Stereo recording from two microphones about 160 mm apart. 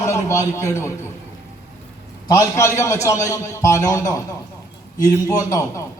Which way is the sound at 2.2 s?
20° left (ahead or behind).